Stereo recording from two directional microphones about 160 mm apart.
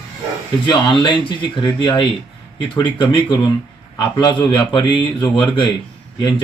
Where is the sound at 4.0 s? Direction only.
30° left (ahead or behind).